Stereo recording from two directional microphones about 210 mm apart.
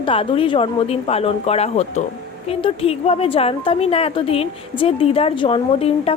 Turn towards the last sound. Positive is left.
turn(degrees=25)  # may be behind; listen again after turning